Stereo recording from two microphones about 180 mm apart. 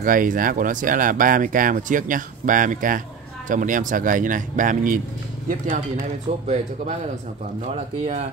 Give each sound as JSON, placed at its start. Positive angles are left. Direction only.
{"t": 0.0, "sound": "speech", "side_deg": -50}
{"t": 6.4, "sound": "speech", "side_deg": -40}